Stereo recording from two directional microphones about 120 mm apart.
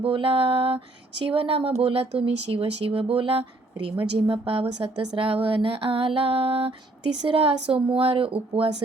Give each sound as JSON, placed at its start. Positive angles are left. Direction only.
{"t": 0.0, "sound": "speech", "side_deg": -45}